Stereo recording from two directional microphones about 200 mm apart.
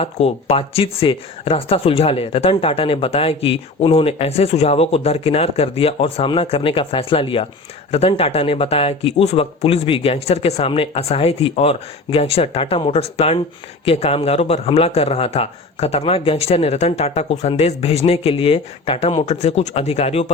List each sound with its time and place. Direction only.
0.0 s a man's voice: 30° left (ahead or behind)